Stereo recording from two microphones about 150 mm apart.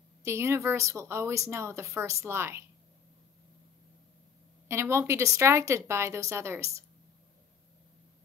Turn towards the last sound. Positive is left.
turn(degrees=-20)  # may be behind; listen again after turning